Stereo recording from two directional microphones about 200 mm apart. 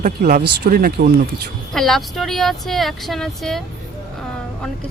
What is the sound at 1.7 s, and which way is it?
Speech, centre (ahead or behind).